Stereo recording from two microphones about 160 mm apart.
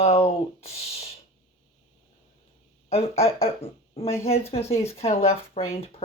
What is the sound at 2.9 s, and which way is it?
Speech, 40° left (ahead or behind).